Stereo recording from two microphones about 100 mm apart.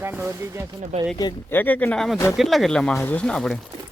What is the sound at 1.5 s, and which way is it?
Speech, 20° left (ahead or behind).